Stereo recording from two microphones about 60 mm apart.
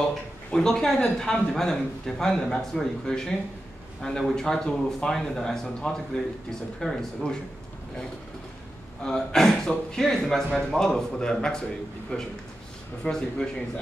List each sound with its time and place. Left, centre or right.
0.5 s a man's voice: centre
9.0 s a man's voice: centre